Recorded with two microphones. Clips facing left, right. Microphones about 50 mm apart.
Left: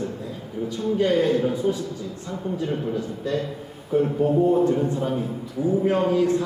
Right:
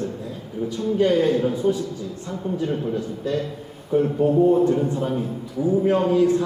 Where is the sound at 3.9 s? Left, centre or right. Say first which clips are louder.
Right 1 dB; centre.